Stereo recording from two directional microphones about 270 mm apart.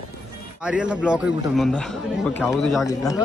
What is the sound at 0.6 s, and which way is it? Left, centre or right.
A man's voice, centre.